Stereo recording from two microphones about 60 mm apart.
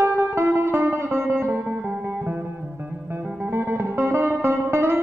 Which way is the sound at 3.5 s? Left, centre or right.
Right.